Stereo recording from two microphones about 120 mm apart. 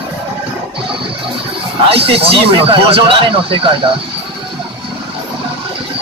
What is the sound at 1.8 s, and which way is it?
Speech, 50° right (ahead or behind).